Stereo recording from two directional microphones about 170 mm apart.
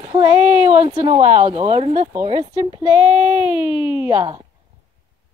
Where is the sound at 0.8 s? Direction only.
30° right (ahead or behind).